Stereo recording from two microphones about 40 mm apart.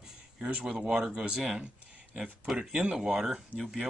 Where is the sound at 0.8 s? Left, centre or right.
Centre.